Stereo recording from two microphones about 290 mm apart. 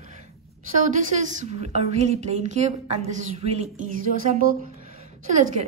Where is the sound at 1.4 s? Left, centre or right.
Right.